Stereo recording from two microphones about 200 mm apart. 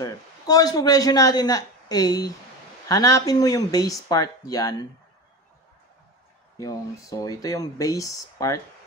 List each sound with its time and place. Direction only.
0.0 s speech: 20° left (ahead or behind)
6.6 s speech: 20° left (ahead or behind)